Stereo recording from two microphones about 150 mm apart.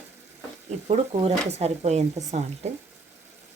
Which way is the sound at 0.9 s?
45° right (ahead or behind).